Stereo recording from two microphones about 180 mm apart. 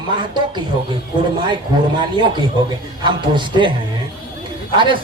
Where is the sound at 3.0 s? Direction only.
25° right (ahead or behind).